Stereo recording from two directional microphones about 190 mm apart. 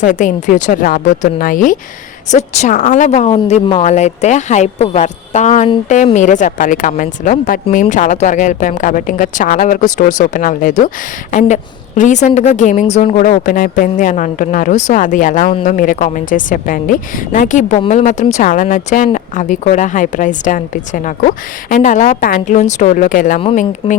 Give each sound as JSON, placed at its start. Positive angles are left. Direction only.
{"t": 0.0, "sound": "speech", "side_deg": 40}